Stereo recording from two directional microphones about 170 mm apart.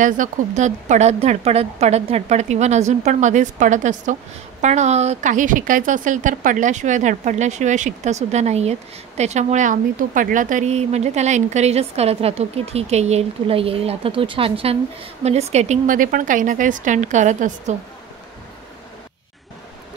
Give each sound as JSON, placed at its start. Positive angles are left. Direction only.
{"t": 0.0, "sound": "speech", "side_deg": -45}